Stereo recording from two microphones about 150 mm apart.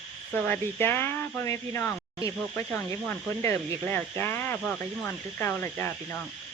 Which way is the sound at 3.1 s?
15° left (ahead or behind).